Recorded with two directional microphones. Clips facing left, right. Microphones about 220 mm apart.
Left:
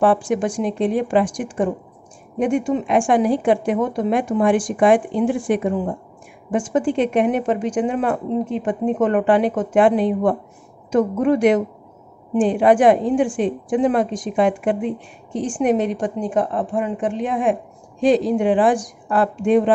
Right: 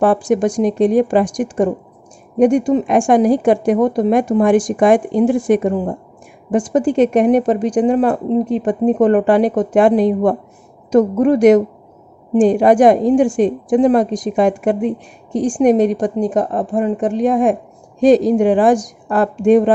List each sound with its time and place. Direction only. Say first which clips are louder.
0.0 s a woman's voice: right 4 dB; 40° right (ahead or behind)